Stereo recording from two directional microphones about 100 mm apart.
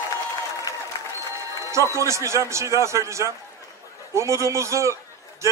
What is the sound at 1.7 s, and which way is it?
A man's voice, 30° right (ahead or behind).